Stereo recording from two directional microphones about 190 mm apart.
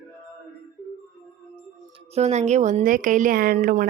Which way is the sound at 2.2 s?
35° right (ahead or behind).